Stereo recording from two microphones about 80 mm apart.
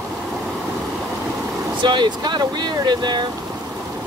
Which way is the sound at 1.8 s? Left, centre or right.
Right.